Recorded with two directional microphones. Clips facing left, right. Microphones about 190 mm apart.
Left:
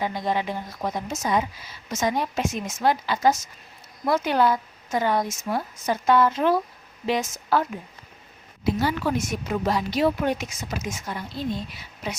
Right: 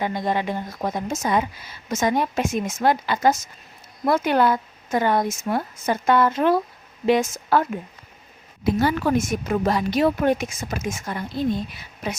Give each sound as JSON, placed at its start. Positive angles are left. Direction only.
{"t": 0.0, "sound": "a woman's voice", "side_deg": -50}
{"t": 8.6, "sound": "speech", "side_deg": -50}